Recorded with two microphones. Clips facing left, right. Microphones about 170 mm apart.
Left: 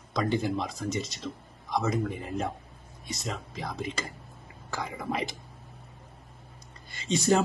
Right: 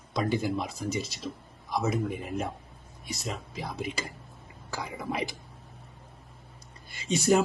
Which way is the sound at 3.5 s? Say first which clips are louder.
Even; 5° right (ahead or behind).